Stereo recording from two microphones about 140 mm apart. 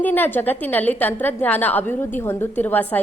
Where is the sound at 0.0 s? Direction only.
15° left (ahead or behind).